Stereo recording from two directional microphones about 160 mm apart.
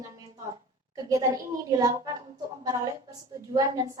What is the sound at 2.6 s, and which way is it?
A woman's voice, 20° right (ahead or behind).